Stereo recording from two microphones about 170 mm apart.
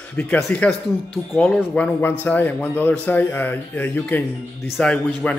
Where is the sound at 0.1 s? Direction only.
10° left (ahead or behind).